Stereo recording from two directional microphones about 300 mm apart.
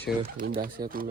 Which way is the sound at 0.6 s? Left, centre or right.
Right.